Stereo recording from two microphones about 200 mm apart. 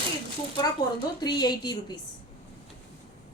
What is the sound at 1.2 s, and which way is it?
Speech, 20° left (ahead or behind).